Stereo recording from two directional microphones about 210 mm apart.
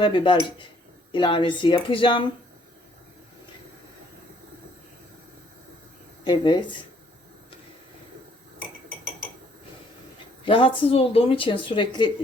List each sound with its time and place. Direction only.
0.0 s speech: 20° left (ahead or behind)
6.2 s speech: 20° left (ahead or behind)
10.4 s speech: 25° left (ahead or behind)